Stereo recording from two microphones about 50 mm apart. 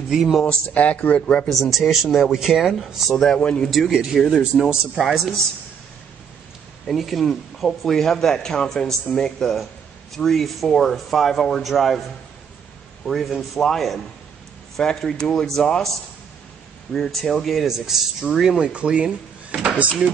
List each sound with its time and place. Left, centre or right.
0.1 s a man's voice: centre
0.7 s speech: left
1.5 s a man's voice: centre
3.1 s speech: centre
3.9 s speech: centre
4.9 s a man's voice: centre
7.0 s a man's voice: centre
13.0 s a man's voice: centre
16.9 s speech: left
17.3 s a man's voice: centre; by 19.7 s right